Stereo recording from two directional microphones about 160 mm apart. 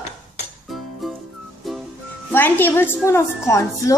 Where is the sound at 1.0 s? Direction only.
Centre (ahead or behind).